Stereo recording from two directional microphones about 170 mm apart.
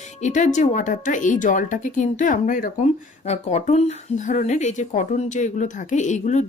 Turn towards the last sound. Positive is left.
turn(degrees=45)  # may be behind; listen again after turning